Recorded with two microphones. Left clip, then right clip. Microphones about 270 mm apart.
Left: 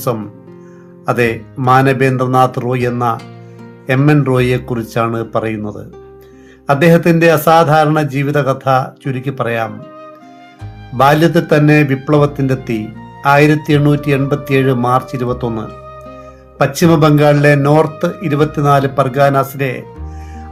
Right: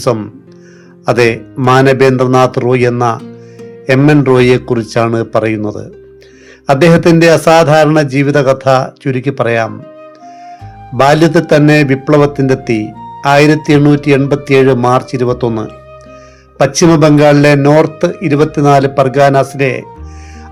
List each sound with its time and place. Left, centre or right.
0.0 s a man's voice: right
11.0 s a man's voice: right